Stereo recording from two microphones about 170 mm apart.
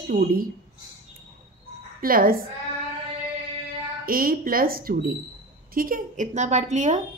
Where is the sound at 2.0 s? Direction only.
60° right (ahead or behind).